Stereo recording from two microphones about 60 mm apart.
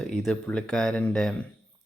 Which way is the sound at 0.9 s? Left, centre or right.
Left.